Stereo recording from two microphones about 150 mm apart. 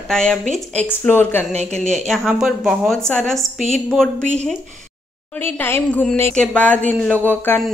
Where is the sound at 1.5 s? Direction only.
50° right (ahead or behind).